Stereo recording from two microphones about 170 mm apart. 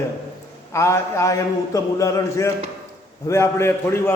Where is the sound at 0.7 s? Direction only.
15° left (ahead or behind).